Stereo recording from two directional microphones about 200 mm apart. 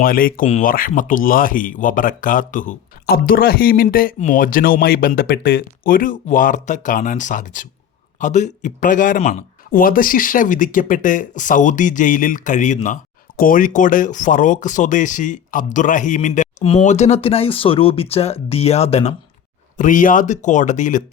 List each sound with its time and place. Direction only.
0.0 s speech: 45° left (ahead or behind)